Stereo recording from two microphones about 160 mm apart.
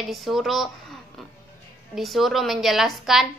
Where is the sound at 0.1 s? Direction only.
Centre (ahead or behind).